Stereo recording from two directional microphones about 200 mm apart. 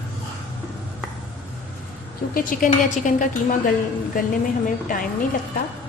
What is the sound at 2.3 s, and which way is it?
Speech, 45° left (ahead or behind).